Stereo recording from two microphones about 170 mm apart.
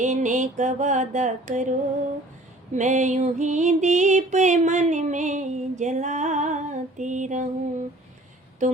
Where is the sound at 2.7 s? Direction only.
45° right (ahead or behind).